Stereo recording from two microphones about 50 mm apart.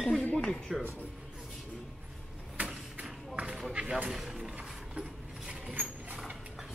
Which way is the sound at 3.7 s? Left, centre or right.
Right.